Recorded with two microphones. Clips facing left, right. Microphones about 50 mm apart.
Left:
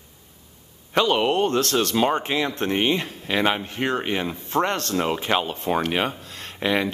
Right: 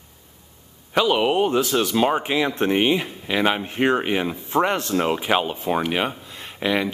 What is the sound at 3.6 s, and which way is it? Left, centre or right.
Speech, right.